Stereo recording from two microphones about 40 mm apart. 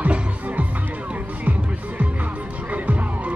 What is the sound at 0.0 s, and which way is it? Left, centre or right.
Music, right.